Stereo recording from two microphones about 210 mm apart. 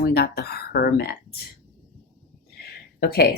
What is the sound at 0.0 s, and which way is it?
Speech, 50° left (ahead or behind).